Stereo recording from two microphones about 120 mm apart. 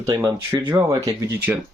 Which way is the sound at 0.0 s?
25° right (ahead or behind).